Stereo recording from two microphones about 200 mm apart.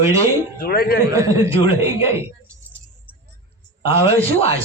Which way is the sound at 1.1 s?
15° right (ahead or behind).